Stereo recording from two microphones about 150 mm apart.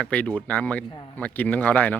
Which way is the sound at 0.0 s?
10° left (ahead or behind).